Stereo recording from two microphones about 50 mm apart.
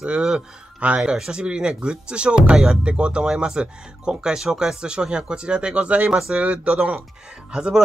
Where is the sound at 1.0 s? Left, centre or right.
Centre.